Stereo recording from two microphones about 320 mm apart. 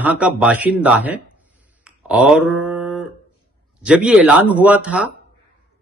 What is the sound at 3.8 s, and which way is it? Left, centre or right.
Speech, centre.